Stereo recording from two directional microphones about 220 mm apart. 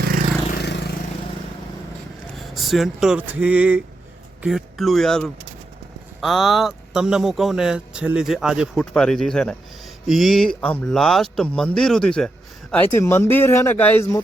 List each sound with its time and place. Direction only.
0.5 s vehicle: 50° left (ahead or behind)
2.6 s speech: centre (ahead or behind)